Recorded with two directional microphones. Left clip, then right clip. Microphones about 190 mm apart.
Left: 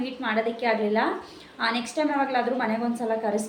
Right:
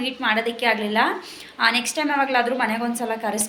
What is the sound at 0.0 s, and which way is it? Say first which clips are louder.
A woman's voice: right 4 dB; centre (ahead or behind).